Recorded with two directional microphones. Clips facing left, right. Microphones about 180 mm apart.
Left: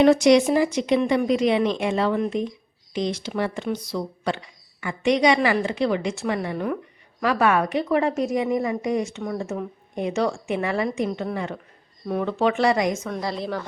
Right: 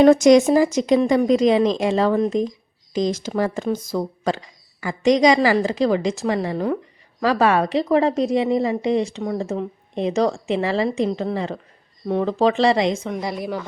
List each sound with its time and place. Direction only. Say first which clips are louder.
0.0 s a woman's voice: right 4 dB; 45° right (ahead or behind); by 13.1 s 25° right (ahead or behind)
13.1 s a woman's voice: right 2 dB; 15° right (ahead or behind)